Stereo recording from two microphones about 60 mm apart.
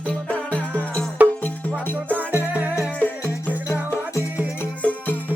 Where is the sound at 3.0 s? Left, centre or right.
Left.